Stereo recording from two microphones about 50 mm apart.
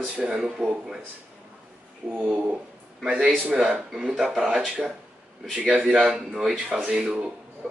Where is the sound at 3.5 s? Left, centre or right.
Centre.